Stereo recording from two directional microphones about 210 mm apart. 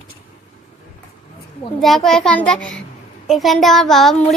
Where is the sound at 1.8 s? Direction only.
Centre (ahead or behind).